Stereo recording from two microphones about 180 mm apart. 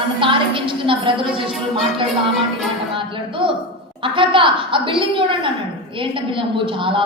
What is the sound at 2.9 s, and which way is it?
Music, 30° right (ahead or behind).